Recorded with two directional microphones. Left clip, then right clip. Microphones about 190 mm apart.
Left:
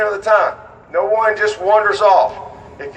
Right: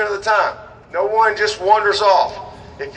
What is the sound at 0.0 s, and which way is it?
A man's voice, 50° left (ahead or behind).